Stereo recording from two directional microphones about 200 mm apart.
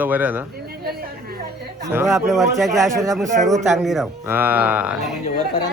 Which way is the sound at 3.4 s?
Centre (ahead or behind).